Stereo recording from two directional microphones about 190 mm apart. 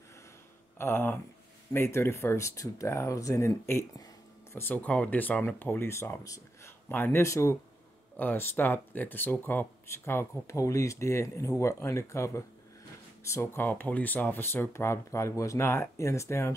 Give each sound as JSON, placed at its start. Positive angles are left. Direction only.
{"t": 0.7, "sound": "speech", "side_deg": 10}